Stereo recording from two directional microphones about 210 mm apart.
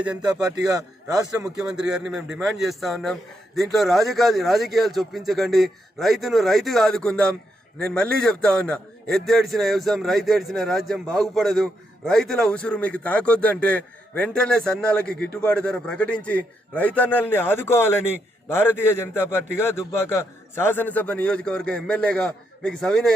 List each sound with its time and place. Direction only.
0.7 s speech: 15° right (ahead or behind)
1.5 s a man's voice: 5° right (ahead or behind)